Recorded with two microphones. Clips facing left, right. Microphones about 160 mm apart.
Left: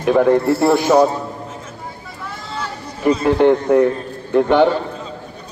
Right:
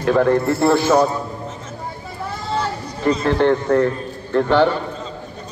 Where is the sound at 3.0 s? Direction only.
10° left (ahead or behind).